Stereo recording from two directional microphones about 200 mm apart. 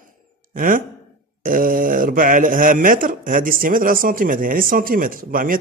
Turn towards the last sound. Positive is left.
turn(degrees=-45)  # may be behind; listen again after turning